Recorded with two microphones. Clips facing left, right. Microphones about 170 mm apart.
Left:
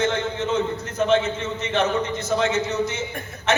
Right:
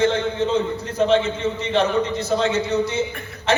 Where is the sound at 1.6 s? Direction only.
30° right (ahead or behind).